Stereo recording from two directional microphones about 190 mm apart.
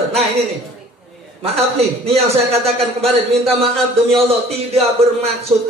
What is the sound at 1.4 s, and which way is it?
A man's voice, 30° right (ahead or behind).